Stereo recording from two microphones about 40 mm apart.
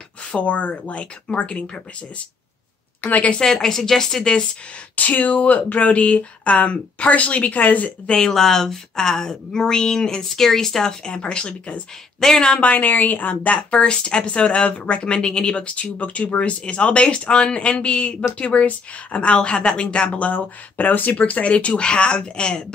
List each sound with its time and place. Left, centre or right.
0.3 s speech: left
3.0 s a woman's voice: left
3.3 s speech: centre
4.2 s speech: centre
4.9 s speech: left
8.2 s speech: centre; by 11.8 s left
12.2 s speech: centre
12.5 s a woman's voice: left
13.7 s speech: left
21.2 s speech: left